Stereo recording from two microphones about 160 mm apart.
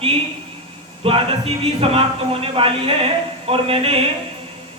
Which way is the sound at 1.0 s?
35° right (ahead or behind).